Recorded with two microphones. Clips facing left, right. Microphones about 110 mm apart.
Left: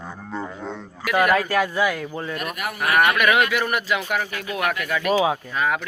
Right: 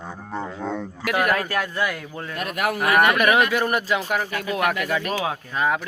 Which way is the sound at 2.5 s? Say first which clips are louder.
Right 6 dB; 90° right.